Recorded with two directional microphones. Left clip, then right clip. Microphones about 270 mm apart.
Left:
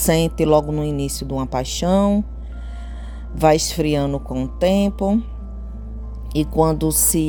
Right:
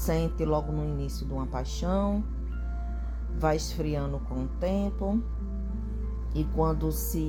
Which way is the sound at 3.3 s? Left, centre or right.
Left.